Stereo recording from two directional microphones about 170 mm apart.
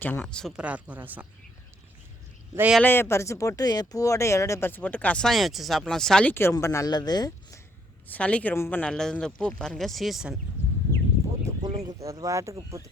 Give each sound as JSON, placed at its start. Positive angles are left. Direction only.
{"t": 0.0, "sound": "speech", "side_deg": 10}
{"t": 0.5, "sound": "speech", "side_deg": -10}
{"t": 2.6, "sound": "speech", "side_deg": -5}
{"t": 2.8, "sound": "speech", "side_deg": 15}
{"t": 8.0, "sound": "speech", "side_deg": 10}
{"t": 11.4, "sound": "a sound", "side_deg": -25}
{"t": 12.0, "sound": "speech", "side_deg": -20}